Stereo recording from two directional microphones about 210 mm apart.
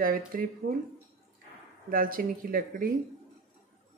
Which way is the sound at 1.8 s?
45° right (ahead or behind).